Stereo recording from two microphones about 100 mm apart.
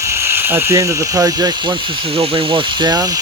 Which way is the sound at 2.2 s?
55° right (ahead or behind).